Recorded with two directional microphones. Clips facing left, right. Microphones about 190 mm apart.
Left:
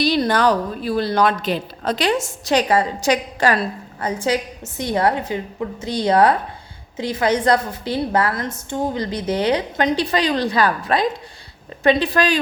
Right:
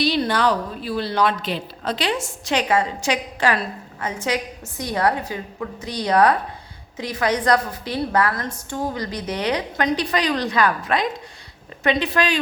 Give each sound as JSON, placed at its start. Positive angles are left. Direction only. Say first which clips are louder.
{"t": 0.0, "sound": "a woman's voice", "louder": "left 3 dB", "side_deg": 45}